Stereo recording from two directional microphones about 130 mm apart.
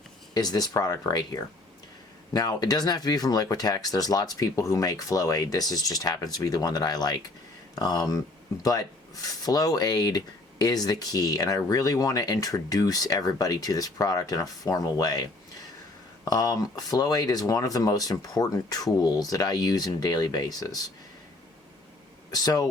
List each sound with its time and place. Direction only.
0.3 s speech: 30° left (ahead or behind)
22.3 s speech: 30° left (ahead or behind)